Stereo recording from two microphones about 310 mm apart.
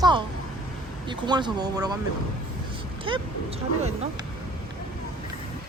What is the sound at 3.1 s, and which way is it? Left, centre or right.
Speech, centre.